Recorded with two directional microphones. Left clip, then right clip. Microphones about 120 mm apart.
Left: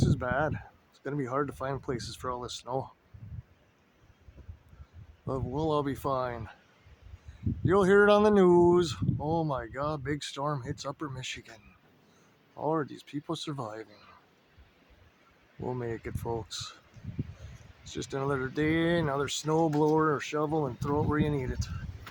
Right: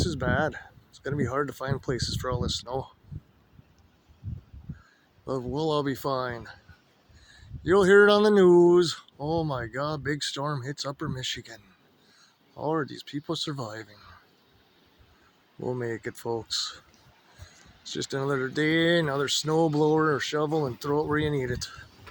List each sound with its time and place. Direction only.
0.0 s speech: 25° right (ahead or behind)
5.2 s speech: 25° right (ahead or behind)
7.6 s speech: 25° right (ahead or behind)
15.6 s speech: 30° right (ahead or behind)
17.9 s speech: 25° right (ahead or behind)